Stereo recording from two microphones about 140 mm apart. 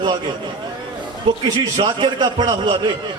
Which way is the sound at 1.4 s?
30° right (ahead or behind).